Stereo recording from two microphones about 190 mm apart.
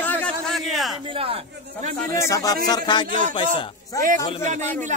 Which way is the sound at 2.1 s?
15° left (ahead or behind).